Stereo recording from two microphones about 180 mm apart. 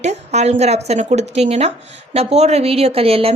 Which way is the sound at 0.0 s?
40° right (ahead or behind).